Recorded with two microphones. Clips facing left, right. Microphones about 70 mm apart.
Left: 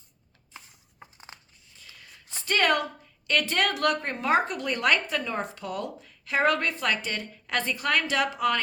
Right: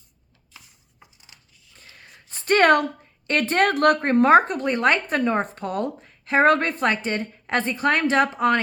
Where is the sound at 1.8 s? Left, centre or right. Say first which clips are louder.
Right 3 dB; right.